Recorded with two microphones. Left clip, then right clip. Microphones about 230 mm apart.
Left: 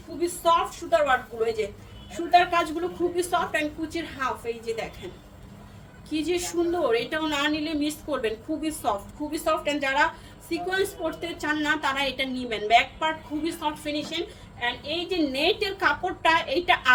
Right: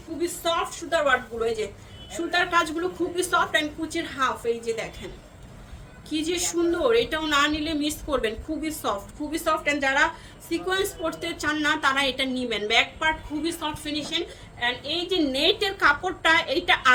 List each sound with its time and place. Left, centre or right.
0.5 s a woman's voice: centre
2.1 s a woman's voice: right
6.1 s a woman's voice: centre